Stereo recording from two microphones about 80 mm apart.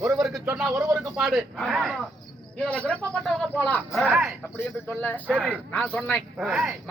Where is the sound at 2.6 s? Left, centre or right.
Centre.